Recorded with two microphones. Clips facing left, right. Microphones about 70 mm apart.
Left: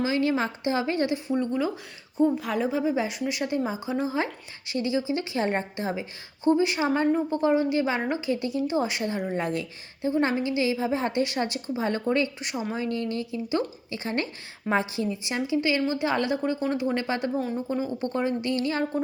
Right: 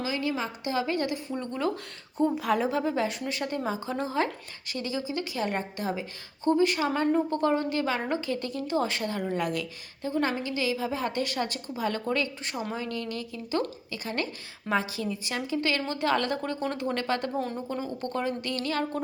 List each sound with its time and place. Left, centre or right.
0.0 s a woman's voice: left
1.5 s a woman's voice: centre
4.7 s speech: left
7.1 s speech: centre
12.5 s a woman's voice: centre
12.7 s a woman's voice: left
17.3 s a woman's voice: centre
17.7 s speech: centre